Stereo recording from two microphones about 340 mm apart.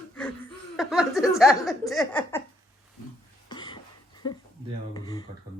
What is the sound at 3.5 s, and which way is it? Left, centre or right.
Cough, centre.